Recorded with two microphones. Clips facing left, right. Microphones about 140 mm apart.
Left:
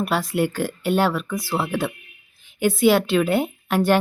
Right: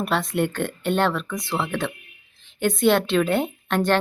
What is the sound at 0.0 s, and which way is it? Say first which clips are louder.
A woman's voice: left 1 dB; centre (ahead or behind).